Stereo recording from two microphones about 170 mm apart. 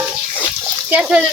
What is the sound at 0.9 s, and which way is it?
Speech, 5° right (ahead or behind).